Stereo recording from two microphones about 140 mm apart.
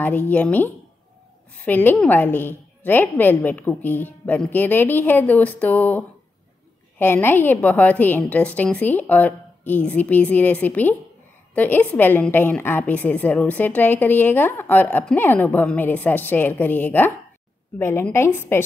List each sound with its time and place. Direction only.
0.0 s a woman's voice: 15° left (ahead or behind)